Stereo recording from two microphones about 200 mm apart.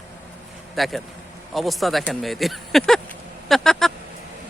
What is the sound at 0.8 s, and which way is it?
Speech, centre (ahead or behind).